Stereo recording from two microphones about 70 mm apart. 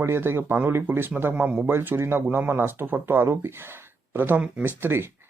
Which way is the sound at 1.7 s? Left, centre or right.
Right.